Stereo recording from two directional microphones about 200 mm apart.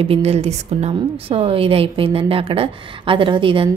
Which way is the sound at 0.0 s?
30° right (ahead or behind).